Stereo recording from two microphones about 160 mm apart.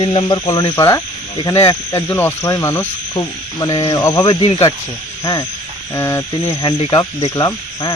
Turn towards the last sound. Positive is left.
turn(degrees=20)  # may be behind; listen again after turning